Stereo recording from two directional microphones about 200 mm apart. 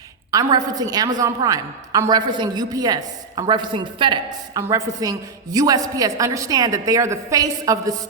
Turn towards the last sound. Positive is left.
turn(degrees=-15)  # may be behind; listen again after turning